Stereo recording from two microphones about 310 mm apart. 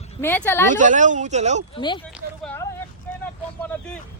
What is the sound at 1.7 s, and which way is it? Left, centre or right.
Speech, centre.